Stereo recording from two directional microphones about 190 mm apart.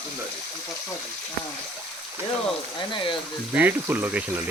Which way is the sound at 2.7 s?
25° left (ahead or behind).